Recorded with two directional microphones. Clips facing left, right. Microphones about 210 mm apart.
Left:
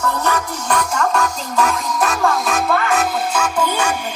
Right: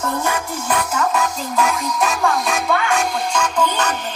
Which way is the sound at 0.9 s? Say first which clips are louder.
Left 1 dB; centre (ahead or behind).